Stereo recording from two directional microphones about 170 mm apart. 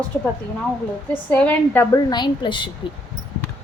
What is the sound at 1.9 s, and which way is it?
Speech, 25° left (ahead or behind).